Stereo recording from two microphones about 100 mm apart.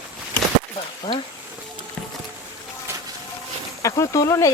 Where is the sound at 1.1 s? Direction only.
40° left (ahead or behind).